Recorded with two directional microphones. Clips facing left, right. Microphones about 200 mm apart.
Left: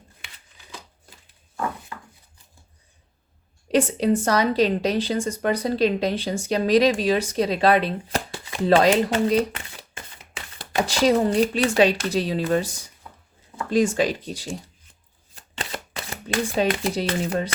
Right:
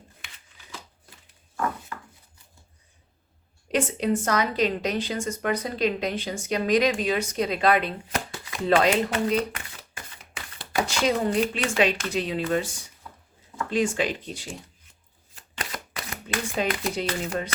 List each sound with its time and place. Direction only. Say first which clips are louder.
1.9 s a sound: even; 20° left (ahead or behind)
3.7 s a woman's voice: left 5 dB; 35° left (ahead or behind)
15.4 s shuffling cards: left 3 dB; 30° left (ahead or behind)